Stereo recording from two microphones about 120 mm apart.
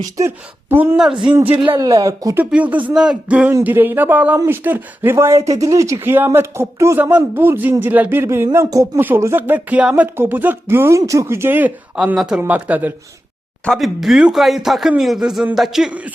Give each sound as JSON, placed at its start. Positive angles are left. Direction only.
{"t": 0.2, "sound": "speech", "side_deg": -20}
{"t": 1.5, "sound": "a man's voice", "side_deg": -40}
{"t": 1.9, "sound": "speech", "side_deg": -30}
{"t": 2.4, "sound": "speech", "side_deg": -10}
{"t": 12.1, "sound": "speech", "side_deg": -5}
{"t": 13.7, "sound": "speech", "side_deg": 0}